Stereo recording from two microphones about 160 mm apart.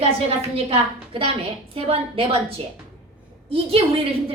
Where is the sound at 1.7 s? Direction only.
35° right (ahead or behind).